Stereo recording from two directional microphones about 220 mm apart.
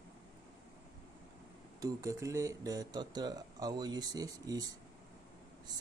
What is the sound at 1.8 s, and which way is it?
Speech, 15° right (ahead or behind).